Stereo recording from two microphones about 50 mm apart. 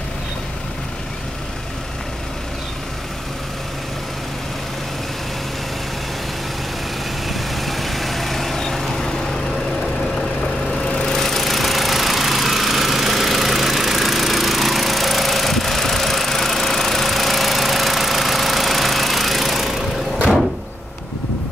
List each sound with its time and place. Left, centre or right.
7.2 s vehicle: centre
11.1 s lawn mower: centre